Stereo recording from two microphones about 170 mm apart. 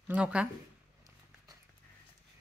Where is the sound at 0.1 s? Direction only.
5° right (ahead or behind).